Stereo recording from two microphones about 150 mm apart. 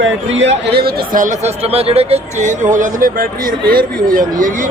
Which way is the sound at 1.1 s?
55° right (ahead or behind).